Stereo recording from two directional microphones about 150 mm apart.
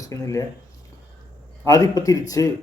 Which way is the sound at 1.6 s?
20° left (ahead or behind).